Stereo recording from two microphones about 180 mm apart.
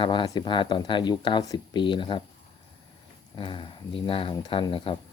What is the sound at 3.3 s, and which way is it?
Speech, 25° left (ahead or behind).